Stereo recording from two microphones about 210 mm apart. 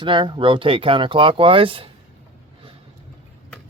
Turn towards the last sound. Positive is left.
turn(degrees=-25)  # may be behind; listen again after turning